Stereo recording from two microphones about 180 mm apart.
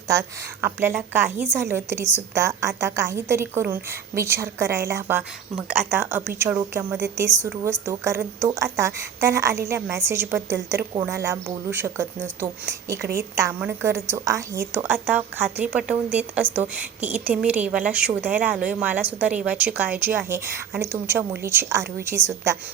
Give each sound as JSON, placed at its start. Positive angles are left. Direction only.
{"t": 0.1, "sound": "a woman's voice", "side_deg": -15}